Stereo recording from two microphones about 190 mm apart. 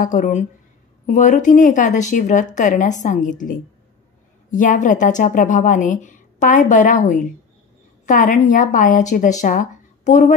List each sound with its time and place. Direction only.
0.0 s speech: 40° left (ahead or behind)
8.0 s speech: 40° left (ahead or behind)